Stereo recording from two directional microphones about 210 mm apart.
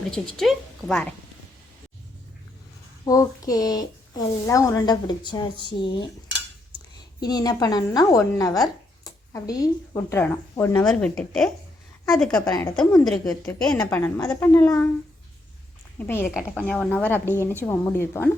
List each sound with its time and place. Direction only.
0.1 s a woman's voice: centre (ahead or behind)
3.0 s a woman's voice: 15° left (ahead or behind)
7.2 s a woman's voice: 20° left (ahead or behind)
16.0 s speech: 10° left (ahead or behind)